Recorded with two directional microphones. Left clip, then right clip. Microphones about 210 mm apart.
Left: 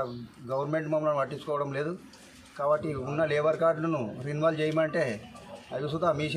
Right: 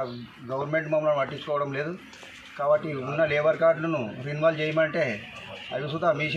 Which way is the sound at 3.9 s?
5° left (ahead or behind).